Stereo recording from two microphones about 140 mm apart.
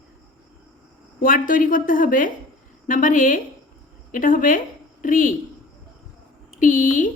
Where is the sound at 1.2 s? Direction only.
85° left.